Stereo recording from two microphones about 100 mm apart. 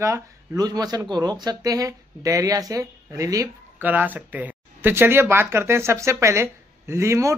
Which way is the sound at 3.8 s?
15° right (ahead or behind).